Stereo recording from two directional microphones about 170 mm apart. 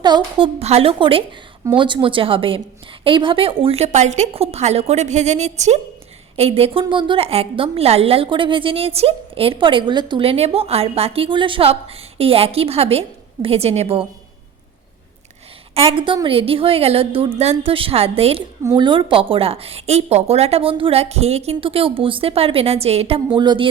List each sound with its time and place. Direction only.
0.0 s a woman's voice: 25° right (ahead or behind)
15.7 s a woman's voice: 35° right (ahead or behind)